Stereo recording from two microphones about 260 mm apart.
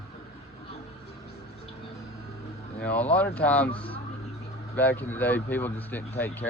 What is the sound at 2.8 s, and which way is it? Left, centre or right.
Speech, centre.